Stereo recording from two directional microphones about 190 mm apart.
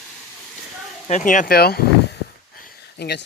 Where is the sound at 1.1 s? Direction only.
40° left (ahead or behind).